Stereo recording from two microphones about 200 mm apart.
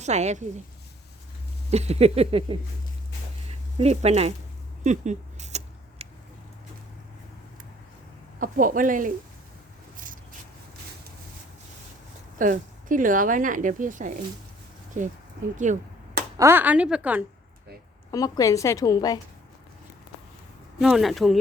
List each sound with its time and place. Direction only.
0.0 s speech: 35° right (ahead or behind)
1.7 s speech: 30° right (ahead or behind)
3.8 s speech: 30° right (ahead or behind)
4.8 s creak: 35° right (ahead or behind)
8.4 s speech: 45° right (ahead or behind)
12.4 s speech: 40° right (ahead or behind)
16.4 s a woman's voice: 10° right (ahead or behind)
18.1 s a woman's voice: 15° left (ahead or behind)
20.7 s speech: centre (ahead or behind)